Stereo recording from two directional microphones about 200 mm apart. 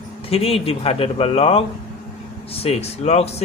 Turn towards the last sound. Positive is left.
turn(degrees=35)  # may be behind; listen again after turning